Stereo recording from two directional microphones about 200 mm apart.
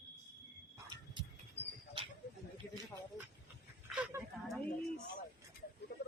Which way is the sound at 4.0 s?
5° right (ahead or behind).